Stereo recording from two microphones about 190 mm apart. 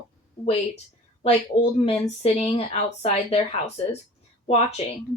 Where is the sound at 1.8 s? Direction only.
30° left (ahead or behind).